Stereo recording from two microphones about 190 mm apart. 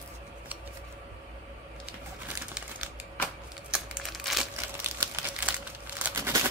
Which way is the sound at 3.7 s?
Centre (ahead or behind).